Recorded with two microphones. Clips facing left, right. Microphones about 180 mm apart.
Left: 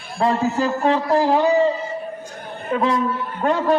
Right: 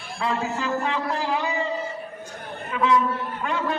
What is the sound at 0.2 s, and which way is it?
A man's voice, 40° left (ahead or behind).